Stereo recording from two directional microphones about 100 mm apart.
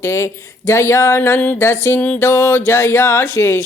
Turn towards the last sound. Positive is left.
turn(degrees=25)  # may be behind; listen again after turning